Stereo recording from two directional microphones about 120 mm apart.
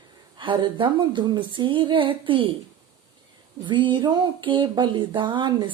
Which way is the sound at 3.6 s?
40° right (ahead or behind).